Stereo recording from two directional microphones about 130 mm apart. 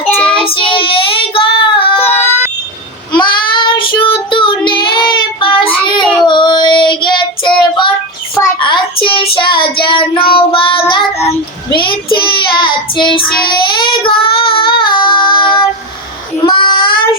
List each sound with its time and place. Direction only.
0.3 s child singing: 45° left (ahead or behind)
3.1 s child singing: 35° left (ahead or behind)